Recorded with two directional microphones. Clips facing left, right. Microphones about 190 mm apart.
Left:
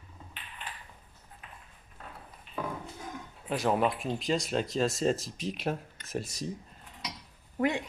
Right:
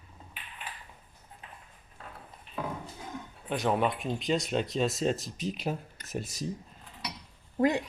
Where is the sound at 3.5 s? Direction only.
Centre (ahead or behind).